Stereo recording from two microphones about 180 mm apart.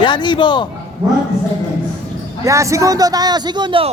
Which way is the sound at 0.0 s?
25° left (ahead or behind).